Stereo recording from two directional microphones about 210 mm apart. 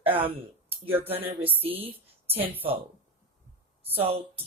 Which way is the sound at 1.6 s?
25° right (ahead or behind).